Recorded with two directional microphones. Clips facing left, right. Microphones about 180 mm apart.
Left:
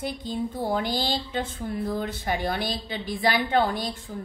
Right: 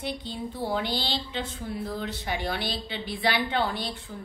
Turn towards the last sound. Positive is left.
turn(degrees=45)  # may be behind; listen again after turning